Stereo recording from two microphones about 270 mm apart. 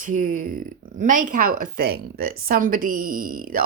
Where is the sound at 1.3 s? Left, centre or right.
Right.